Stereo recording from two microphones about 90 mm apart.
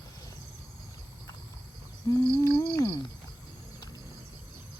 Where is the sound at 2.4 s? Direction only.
35° left (ahead or behind).